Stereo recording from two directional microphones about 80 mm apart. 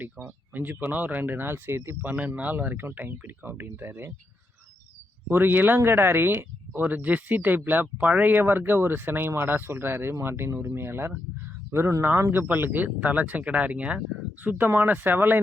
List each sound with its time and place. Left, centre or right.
0.0 s speech: right
5.3 s speech: right